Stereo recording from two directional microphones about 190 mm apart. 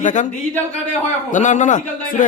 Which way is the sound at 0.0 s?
40° left (ahead or behind).